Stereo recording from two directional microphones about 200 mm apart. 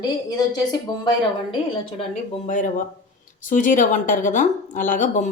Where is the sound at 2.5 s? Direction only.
40° left (ahead or behind).